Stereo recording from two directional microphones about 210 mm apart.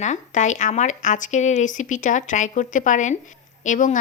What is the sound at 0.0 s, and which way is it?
A woman's voice, 35° left (ahead or behind).